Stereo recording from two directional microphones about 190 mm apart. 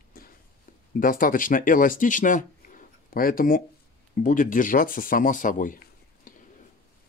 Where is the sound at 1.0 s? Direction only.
45° left (ahead or behind).